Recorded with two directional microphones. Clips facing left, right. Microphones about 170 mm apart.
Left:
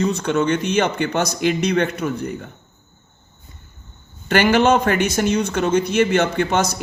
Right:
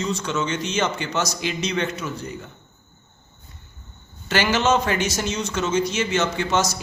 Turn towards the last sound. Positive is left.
turn(degrees=55)  # may be behind; listen again after turning